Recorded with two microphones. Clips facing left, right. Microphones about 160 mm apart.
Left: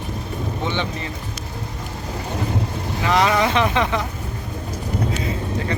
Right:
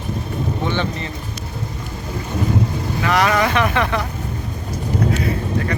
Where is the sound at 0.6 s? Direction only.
15° left (ahead or behind).